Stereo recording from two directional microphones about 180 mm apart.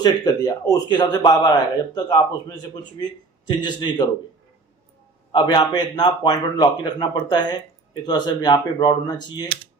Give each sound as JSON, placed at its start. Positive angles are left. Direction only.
{"t": 0.0, "sound": "a man's voice", "side_deg": 20}
{"t": 5.3, "sound": "a man's voice", "side_deg": 25}